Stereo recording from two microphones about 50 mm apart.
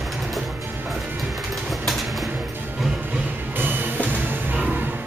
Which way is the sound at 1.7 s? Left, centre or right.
Centre.